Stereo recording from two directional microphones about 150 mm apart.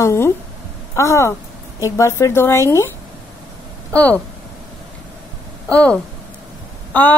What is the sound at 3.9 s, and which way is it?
Speech, 10° left (ahead or behind).